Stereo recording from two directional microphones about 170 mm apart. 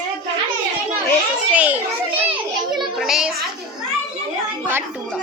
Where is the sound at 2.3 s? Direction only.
25° right (ahead or behind).